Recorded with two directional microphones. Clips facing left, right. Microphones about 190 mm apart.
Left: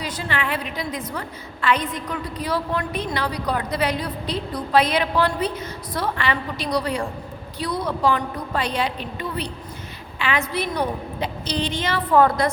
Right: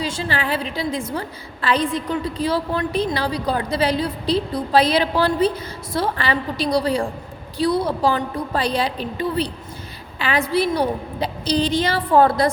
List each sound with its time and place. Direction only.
0.0 s a woman's voice: 30° right (ahead or behind)